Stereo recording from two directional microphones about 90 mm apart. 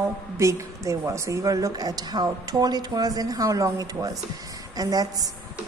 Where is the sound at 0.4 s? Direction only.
35° right (ahead or behind).